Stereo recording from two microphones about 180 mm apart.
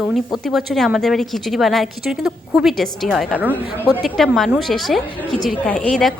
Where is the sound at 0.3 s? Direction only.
Centre (ahead or behind).